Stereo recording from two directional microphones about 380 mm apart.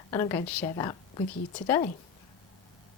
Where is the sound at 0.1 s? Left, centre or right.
Centre.